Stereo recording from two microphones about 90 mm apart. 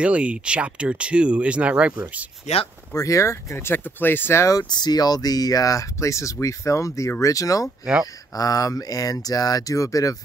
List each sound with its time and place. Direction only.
0.0 s speech: 15° right (ahead or behind)
2.9 s speech: 35° left (ahead or behind)
4.5 s speech: 45° left (ahead or behind)